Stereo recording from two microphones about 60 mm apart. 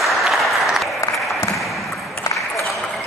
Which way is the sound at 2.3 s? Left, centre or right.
Left.